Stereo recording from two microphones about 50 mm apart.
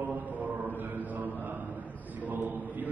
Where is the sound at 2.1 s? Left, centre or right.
Right.